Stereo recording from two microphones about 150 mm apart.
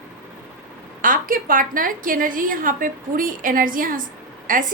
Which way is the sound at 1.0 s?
65° right (ahead or behind).